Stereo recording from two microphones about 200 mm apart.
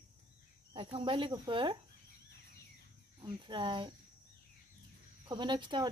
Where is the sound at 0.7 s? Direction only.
25° right (ahead or behind).